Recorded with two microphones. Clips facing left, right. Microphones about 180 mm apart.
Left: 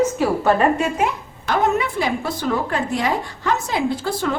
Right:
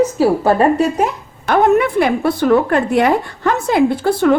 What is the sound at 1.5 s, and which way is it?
A woman's voice, 55° right (ahead or behind).